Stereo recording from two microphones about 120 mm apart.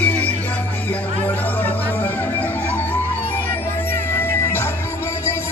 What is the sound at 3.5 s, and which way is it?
Music, 20° left (ahead or behind).